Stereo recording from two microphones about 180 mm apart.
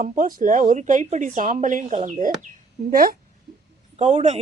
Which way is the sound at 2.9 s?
55° right (ahead or behind).